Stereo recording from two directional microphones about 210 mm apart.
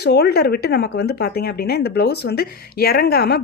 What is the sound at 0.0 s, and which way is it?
Speech, 50° left (ahead or behind).